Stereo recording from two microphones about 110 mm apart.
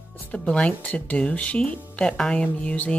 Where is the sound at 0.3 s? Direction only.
10° left (ahead or behind).